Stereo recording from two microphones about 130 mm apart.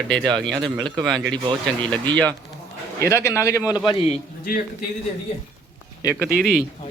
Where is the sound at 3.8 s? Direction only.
45° left (ahead or behind).